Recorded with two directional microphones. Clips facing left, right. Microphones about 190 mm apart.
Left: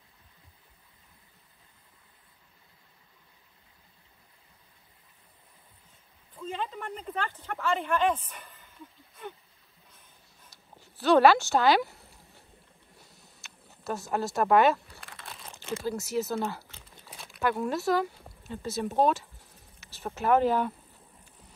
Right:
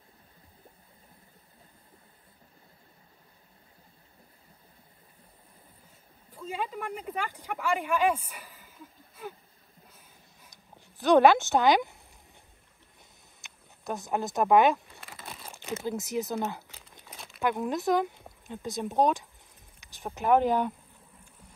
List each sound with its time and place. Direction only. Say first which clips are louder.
6.3 s speech: right 1 dB; 10° right (ahead or behind)
9.9 s a sound: right 2 dB; 15° right (ahead or behind)
13.0 s a sound: right 1 dB; 15° right (ahead or behind)
14.9 s crumpling: right 2 dB; centre (ahead or behind)
15.8 s speech: left 1 dB; 20° right (ahead or behind)
16.5 s crumpling: even; 15° right (ahead or behind)
17.0 s crumpling: right 1 dB; centre (ahead or behind)
17.4 s speech: even; 15° right (ahead or behind)
18.0 s a sound: even; centre (ahead or behind)
18.4 s speech: left 2 dB; 15° right (ahead or behind)